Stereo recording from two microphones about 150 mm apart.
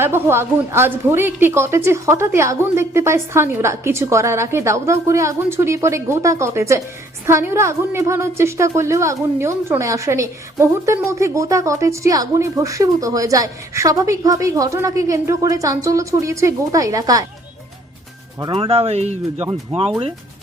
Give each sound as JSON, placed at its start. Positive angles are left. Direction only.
{"t": 0.0, "sound": "a woman's voice", "side_deg": -15}
{"t": 18.5, "sound": "speech", "side_deg": -40}